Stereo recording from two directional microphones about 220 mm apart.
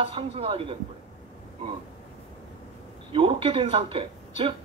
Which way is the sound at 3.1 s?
25° right (ahead or behind).